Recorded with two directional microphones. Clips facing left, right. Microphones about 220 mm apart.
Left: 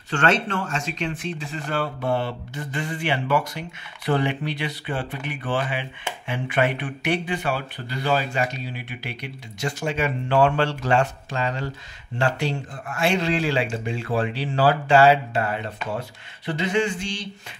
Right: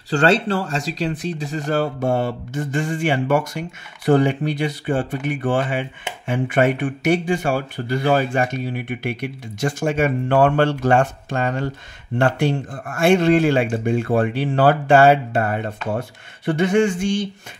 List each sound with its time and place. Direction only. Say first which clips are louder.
0.1 s speech: right 5 dB; 35° right (ahead or behind); by 17.3 s 50° right (ahead or behind)